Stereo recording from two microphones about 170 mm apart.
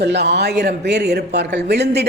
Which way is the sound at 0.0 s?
80° right.